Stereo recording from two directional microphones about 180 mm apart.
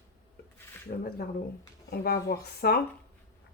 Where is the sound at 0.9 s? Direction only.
55° left (ahead or behind).